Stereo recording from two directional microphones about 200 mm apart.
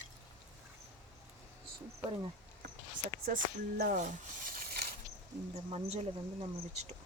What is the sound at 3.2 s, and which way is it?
Speech, 50° right (ahead or behind).